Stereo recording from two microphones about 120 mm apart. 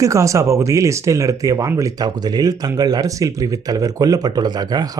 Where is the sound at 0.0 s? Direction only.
25° right (ahead or behind).